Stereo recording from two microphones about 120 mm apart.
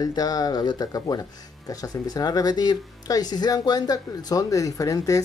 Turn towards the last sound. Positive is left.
turn(degrees=25)  # may be behind; listen again after turning